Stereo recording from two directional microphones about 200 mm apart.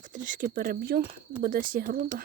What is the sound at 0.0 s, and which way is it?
Speech, 40° right (ahead or behind).